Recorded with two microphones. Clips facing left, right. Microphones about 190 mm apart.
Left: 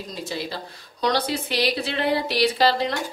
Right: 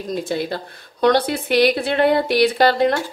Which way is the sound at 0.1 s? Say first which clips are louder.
Right 9 dB; 55° right (ahead or behind).